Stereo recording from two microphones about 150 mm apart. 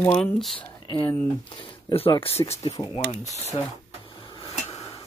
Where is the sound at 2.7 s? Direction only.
30° left (ahead or behind).